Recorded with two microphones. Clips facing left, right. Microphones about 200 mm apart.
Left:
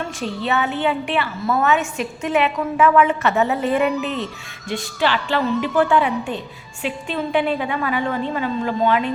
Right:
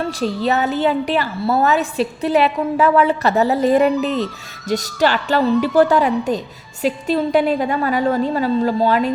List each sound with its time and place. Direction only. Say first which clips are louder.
0.0 s a woman's voice: right 5 dB; 35° right (ahead or behind)